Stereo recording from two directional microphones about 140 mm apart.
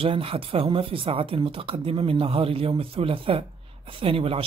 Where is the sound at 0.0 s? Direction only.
40° right (ahead or behind).